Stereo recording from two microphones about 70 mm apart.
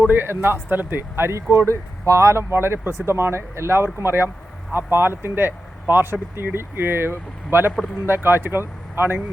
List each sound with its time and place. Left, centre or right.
0.1 s speech: right